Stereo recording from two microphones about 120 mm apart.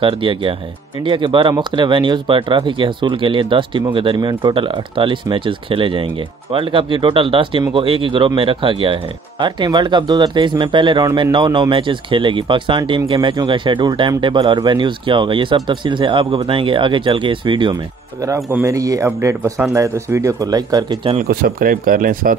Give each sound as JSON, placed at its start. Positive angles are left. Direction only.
{"t": 0.0, "sound": "speech", "side_deg": -45}
{"t": 18.5, "sound": "speech", "side_deg": -25}